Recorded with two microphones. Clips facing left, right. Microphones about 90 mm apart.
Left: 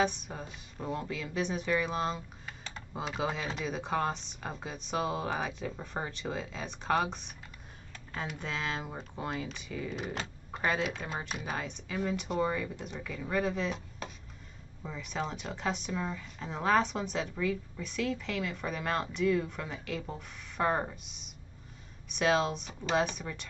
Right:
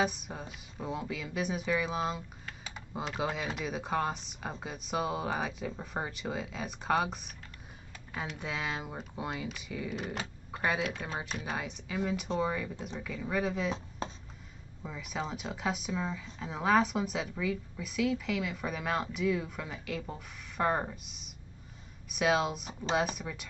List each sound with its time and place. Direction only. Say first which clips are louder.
0.0 s speech: left 1 dB; 5° right (ahead or behind)
14.0 s a sound: right 5 dB; 30° right (ahead or behind)
14.8 s speech: left 1 dB; 5° right (ahead or behind)